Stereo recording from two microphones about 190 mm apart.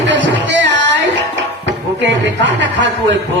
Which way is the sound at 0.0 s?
70° right (ahead or behind).